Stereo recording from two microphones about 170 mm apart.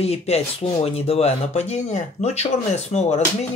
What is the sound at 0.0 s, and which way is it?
Speech, 35° left (ahead or behind).